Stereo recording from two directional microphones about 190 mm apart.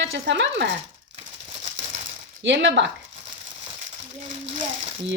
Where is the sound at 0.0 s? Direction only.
70° right (ahead or behind).